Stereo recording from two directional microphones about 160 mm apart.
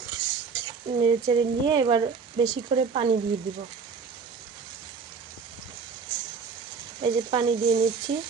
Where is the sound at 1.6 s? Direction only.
25° right (ahead or behind).